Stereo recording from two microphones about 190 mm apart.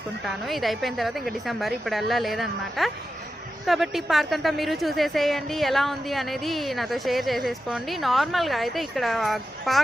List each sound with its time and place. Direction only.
0.3 s a woman's voice: centre (ahead or behind)